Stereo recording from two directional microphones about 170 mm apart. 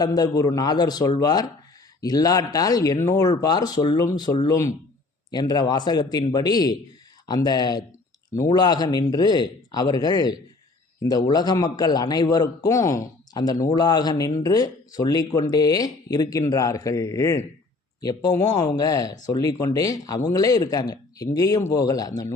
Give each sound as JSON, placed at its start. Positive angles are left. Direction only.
{"t": 0.0, "sound": "a man's voice", "side_deg": 20}